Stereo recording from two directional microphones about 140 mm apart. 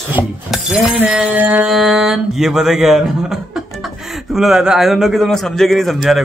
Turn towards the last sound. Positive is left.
turn(degrees=0)  # may be behind; listen again after turning